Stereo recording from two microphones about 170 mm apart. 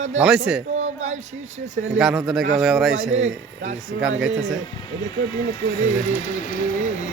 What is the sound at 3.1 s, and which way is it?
Speech, 40° right (ahead or behind).